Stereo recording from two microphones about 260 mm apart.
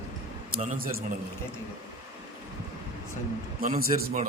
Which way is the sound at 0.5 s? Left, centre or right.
Right.